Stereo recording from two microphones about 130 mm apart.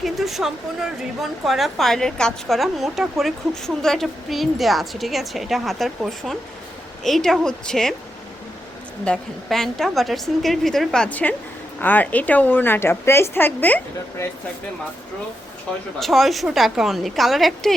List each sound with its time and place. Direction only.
0.0 s a woman's voice: centre (ahead or behind)
9.0 s a woman's voice: 5° left (ahead or behind)
16.0 s a woman's voice: centre (ahead or behind)